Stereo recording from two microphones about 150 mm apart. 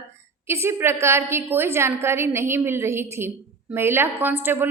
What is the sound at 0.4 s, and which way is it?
A woman's voice, 15° right (ahead or behind).